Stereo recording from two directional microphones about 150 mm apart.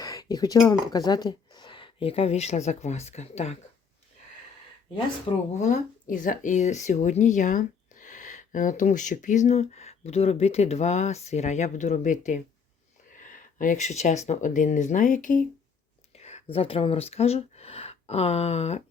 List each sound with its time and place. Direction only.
0.0 s speech: 25° left (ahead or behind); by 3.5 s 45° left (ahead or behind)
5.5 s speech: 55° left (ahead or behind)
16.1 s speech: 45° left (ahead or behind)